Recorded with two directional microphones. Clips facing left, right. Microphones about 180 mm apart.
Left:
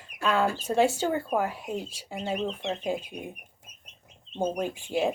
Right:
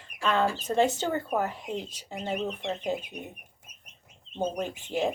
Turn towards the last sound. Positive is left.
turn(degrees=10)  # may be behind; listen again after turning